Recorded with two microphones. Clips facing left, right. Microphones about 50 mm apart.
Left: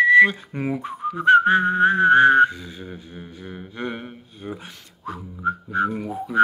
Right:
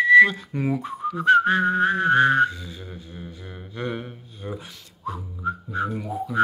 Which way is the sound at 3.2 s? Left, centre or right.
Left.